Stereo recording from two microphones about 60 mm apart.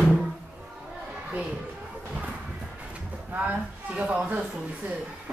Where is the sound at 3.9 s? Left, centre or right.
Centre.